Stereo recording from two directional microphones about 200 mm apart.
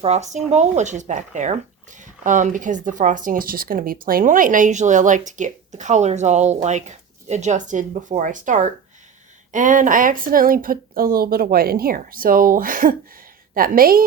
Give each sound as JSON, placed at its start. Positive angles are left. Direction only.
{"t": 0.0, "sound": "speech", "side_deg": -35}